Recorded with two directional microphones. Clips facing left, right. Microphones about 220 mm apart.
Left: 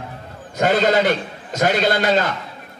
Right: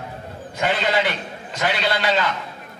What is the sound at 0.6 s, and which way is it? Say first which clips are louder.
A man's voice: left 5 dB; 45° left (ahead or behind).